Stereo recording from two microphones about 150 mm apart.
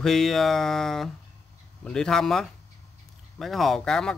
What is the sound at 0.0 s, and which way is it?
Speech, centre (ahead or behind).